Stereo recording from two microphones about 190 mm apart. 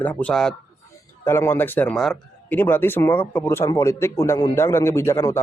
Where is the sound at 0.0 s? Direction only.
10° left (ahead or behind).